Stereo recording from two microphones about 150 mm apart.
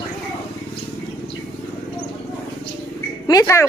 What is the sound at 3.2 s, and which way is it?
Speech, 20° left (ahead or behind).